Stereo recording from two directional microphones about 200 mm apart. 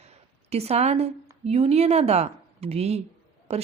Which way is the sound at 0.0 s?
30° right (ahead or behind).